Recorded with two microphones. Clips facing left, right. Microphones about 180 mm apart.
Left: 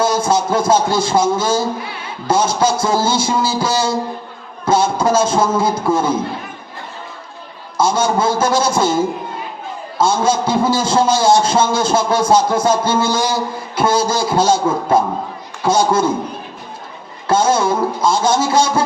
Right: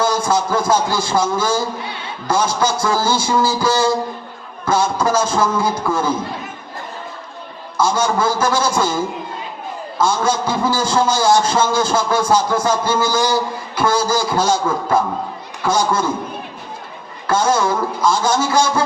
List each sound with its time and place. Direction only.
0.0 s a man's voice: 25° left (ahead or behind)
7.8 s a man's voice: 25° left (ahead or behind)
17.2 s a man's voice: 25° left (ahead or behind)